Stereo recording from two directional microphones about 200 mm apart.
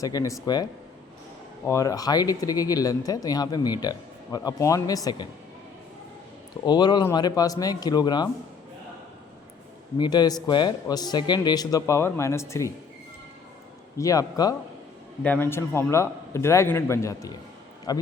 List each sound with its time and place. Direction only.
0.0 s a man's voice: 15° left (ahead or behind)
6.7 s speech: 20° left (ahead or behind)
10.0 s speech: 20° left (ahead or behind)
14.0 s a man's voice: 15° left (ahead or behind)